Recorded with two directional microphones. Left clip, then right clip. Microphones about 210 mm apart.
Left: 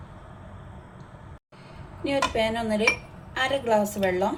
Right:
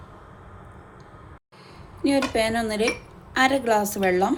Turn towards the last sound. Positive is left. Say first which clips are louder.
# right 3 dB
turn(degrees=-35)  # may be behind; listen again after turning